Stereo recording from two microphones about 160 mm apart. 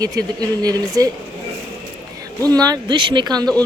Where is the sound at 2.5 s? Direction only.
25° right (ahead or behind).